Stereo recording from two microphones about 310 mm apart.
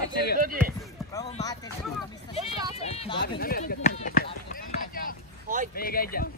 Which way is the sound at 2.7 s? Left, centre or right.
Centre.